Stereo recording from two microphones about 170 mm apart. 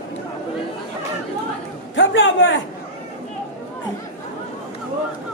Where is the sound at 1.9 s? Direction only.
90° left.